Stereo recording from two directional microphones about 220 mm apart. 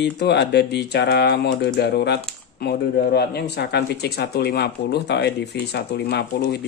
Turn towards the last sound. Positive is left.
turn(degrees=50)  # may be behind; listen again after turning